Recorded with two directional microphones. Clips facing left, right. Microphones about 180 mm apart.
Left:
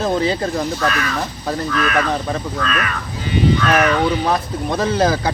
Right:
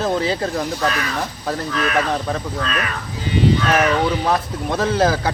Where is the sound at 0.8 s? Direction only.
30° right (ahead or behind).